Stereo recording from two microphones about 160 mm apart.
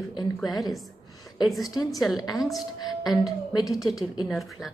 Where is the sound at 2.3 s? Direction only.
Centre (ahead or behind).